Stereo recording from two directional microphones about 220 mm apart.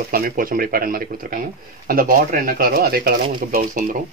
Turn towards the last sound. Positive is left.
turn(degrees=-35)  # may be behind; listen again after turning